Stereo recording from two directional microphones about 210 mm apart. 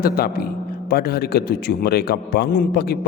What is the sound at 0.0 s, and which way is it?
A man's voice, 45° left (ahead or behind).